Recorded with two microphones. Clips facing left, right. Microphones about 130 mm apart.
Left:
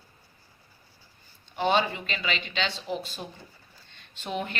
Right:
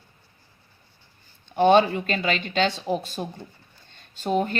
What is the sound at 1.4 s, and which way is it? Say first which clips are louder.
Speech: right 8 dB; 50° right (ahead or behind).